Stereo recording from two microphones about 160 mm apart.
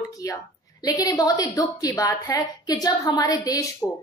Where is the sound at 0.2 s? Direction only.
20° left (ahead or behind).